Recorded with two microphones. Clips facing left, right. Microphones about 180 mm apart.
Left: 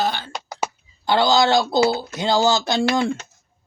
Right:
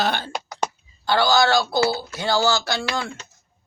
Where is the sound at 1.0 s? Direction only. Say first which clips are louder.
Left 1 dB; 20° left (ahead or behind).